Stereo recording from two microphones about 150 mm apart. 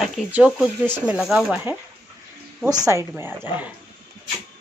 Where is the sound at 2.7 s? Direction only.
20° right (ahead or behind).